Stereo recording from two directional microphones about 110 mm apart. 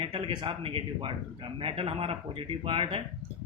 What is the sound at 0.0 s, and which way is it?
Speech, 50° right (ahead or behind).